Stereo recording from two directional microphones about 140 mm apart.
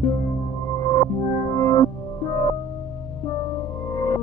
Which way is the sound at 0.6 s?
20° left (ahead or behind).